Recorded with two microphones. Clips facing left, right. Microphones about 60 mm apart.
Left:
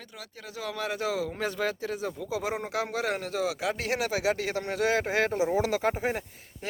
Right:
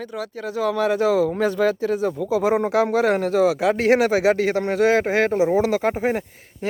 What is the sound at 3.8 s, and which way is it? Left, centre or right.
Speech, right.